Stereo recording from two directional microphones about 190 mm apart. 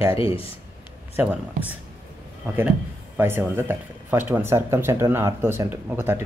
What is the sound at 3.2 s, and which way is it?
Speech, 10° right (ahead or behind).